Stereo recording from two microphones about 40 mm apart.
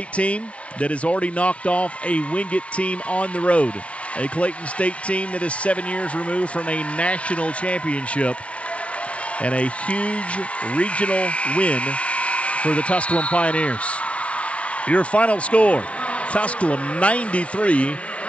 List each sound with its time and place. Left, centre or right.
0.1 s speech: left
9.4 s speech: left